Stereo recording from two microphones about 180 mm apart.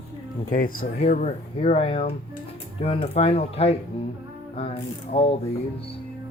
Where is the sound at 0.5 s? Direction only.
50° left (ahead or behind).